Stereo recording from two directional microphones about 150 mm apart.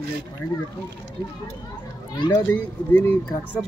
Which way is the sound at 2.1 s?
30° left (ahead or behind).